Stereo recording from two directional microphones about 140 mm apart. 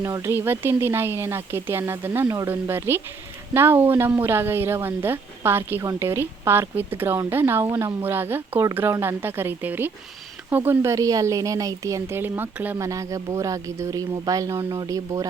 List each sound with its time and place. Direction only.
0.0 s a woman's voice: 20° right (ahead or behind)